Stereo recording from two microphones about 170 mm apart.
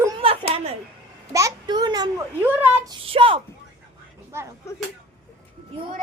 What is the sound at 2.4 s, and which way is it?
Speech, 10° right (ahead or behind).